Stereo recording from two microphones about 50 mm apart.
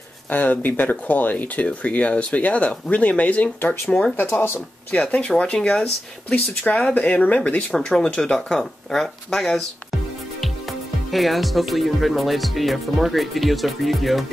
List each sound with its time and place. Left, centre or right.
0.3 s speech: left
7.7 s speech: centre
11.1 s speech: centre